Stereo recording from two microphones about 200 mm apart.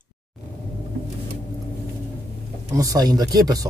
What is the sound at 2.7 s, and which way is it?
Speech, 15° right (ahead or behind).